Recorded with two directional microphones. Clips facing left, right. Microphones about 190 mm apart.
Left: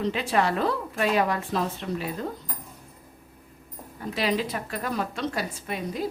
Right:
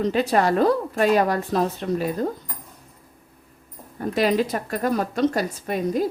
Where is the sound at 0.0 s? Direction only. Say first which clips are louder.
Right 5 dB; 40° right (ahead or behind).